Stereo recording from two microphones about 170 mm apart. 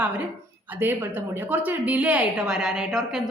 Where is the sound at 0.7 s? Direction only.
10° right (ahead or behind).